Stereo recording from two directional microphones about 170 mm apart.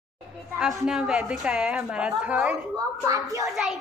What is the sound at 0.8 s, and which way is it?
A woman's voice, centre (ahead or behind).